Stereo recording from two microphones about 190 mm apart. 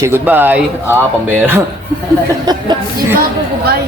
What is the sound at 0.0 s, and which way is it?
Speech, 10° right (ahead or behind).